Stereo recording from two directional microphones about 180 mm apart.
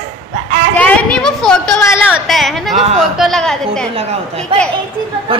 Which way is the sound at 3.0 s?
Centre (ahead or behind).